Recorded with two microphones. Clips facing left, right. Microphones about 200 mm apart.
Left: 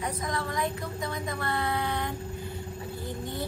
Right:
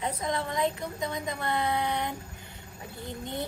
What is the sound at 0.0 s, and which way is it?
Speech, 20° right (ahead or behind).